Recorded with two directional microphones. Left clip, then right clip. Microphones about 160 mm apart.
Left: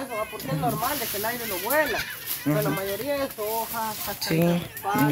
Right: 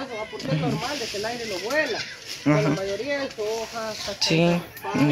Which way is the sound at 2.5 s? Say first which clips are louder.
Right 4 dB; 15° right (ahead or behind).